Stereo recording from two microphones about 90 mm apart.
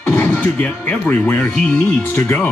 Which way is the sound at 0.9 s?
15° left (ahead or behind).